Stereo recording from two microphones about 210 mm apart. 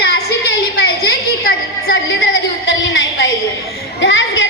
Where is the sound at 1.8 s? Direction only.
70° left (ahead or behind).